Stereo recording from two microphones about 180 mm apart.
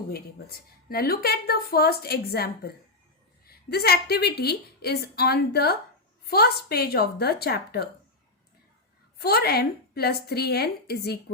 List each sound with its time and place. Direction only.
0.1 s a woman's voice: 60° left (ahead or behind)
9.1 s a woman's voice: 60° left (ahead or behind)